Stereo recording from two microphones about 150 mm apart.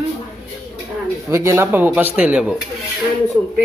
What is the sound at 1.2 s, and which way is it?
A child's voice, 20° right (ahead or behind).